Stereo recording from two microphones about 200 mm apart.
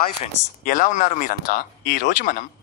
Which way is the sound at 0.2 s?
40° left (ahead or behind).